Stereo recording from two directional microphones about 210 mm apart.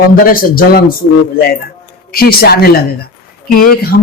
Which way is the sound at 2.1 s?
45° left (ahead or behind).